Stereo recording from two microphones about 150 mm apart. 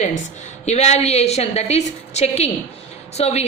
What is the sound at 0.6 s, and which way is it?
A woman's voice, 45° left (ahead or behind).